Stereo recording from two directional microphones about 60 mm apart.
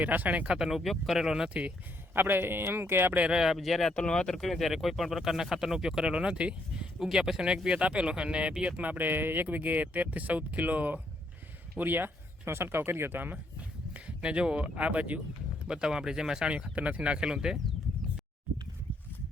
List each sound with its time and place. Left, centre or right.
0.0 s speech: right
0.5 s speech: centre
2.1 s speech: right
3.1 s speech: right
3.3 s speech: centre
3.9 s speech: centre
8.8 s speech: right
13.9 s speech: centre
15.6 s speech: centre